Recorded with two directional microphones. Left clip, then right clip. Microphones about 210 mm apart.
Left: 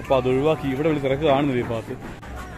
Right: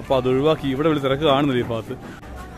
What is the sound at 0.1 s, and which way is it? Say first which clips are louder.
A man's voice: right 1 dB; 15° right (ahead or behind).